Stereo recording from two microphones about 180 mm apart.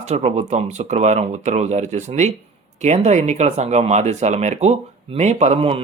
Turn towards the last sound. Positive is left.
turn(degrees=-35)  # may be behind; listen again after turning